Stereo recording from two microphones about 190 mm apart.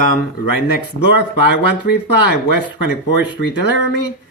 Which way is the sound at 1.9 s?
50° left (ahead or behind).